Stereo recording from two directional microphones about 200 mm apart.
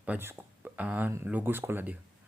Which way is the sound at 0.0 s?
10° right (ahead or behind).